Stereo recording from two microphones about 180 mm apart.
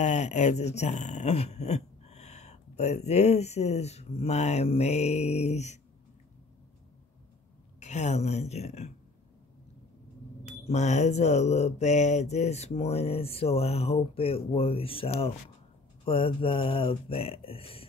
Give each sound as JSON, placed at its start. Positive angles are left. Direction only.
{"t": 0.0, "sound": "speech", "side_deg": 40}
{"t": 7.8, "sound": "speech", "side_deg": 40}
{"t": 10.4, "sound": "speech", "side_deg": 40}